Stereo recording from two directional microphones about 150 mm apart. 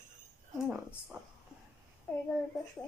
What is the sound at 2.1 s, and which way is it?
Speech, 10° left (ahead or behind).